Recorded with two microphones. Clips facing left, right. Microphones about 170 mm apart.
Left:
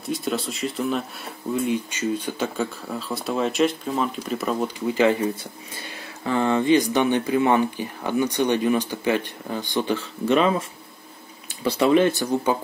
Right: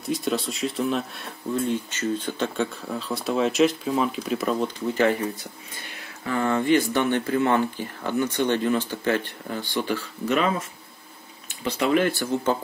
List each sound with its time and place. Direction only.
0.0 s speech: centre (ahead or behind)
1.7 s speech: 10° left (ahead or behind)
6.2 s speech: 25° left (ahead or behind)
11.6 s speech: 30° left (ahead or behind)